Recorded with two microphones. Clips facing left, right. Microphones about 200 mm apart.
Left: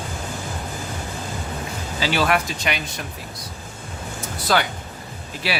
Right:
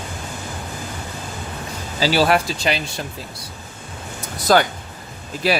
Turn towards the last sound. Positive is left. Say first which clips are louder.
# right 6 dB
turn(degrees=-45)  # may be behind; listen again after turning